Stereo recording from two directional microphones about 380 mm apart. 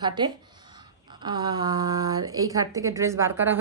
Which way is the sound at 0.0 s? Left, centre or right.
Centre.